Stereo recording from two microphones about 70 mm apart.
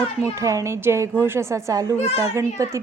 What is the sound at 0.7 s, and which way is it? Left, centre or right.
A woman's voice, right.